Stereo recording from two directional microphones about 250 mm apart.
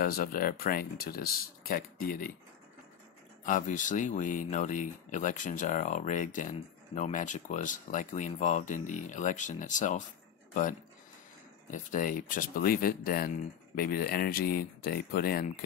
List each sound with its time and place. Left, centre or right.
0.0 s speech: left
3.4 s speech: left